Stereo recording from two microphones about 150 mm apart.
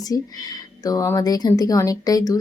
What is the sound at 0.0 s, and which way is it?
A woman's voice, 25° left (ahead or behind).